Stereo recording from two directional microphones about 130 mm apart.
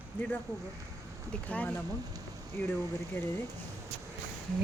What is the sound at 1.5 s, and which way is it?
Speech, 10° left (ahead or behind).